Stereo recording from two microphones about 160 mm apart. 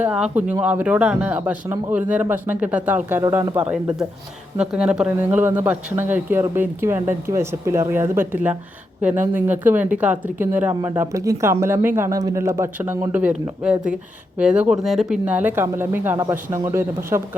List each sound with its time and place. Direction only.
0.0 s speech: 10° right (ahead or behind)